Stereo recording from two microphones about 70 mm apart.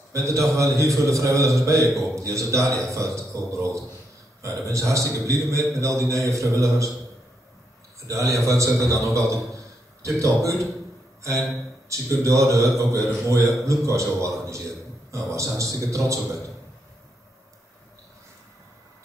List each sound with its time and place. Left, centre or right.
0.1 s a man's voice: right
8.1 s a man's voice: right
11.9 s a man's voice: right